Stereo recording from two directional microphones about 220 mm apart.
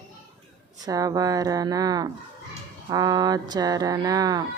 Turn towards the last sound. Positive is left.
turn(degrees=-15)  # may be behind; listen again after turning